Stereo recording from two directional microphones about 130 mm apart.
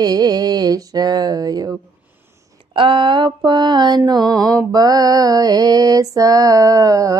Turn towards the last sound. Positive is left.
turn(degrees=-25)  # may be behind; listen again after turning